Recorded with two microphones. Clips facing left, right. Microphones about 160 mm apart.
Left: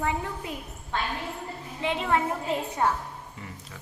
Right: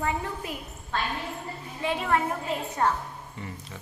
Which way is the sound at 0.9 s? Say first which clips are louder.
Even; 15° left (ahead or behind).